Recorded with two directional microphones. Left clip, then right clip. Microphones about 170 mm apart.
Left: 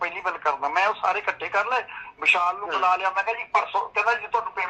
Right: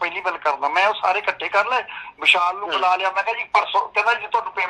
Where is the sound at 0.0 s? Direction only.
35° right (ahead or behind).